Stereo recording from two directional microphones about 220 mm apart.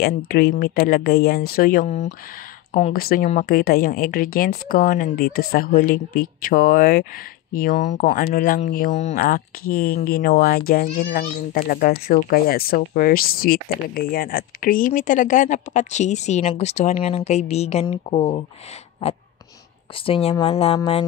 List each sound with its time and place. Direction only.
0.0 s speech: 40° left (ahead or behind)
20.1 s speech: 25° left (ahead or behind)